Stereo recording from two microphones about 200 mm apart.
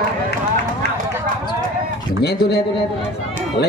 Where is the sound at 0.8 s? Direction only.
55° left (ahead or behind).